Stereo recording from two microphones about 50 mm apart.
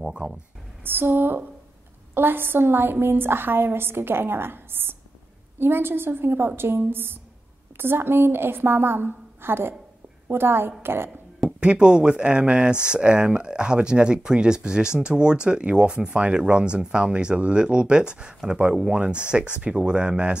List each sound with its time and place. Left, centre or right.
0.0 s speech: centre
0.8 s a woman's voice: right
11.6 s speech: centre